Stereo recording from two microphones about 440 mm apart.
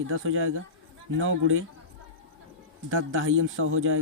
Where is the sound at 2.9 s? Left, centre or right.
Right.